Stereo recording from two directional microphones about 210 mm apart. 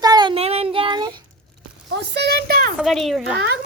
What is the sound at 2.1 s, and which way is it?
Speech, 50° right (ahead or behind).